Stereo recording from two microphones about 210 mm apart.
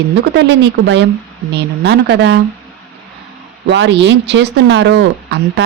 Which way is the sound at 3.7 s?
55° right (ahead or behind).